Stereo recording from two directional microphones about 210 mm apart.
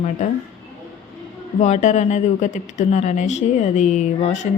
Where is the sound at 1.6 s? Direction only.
35° left (ahead or behind).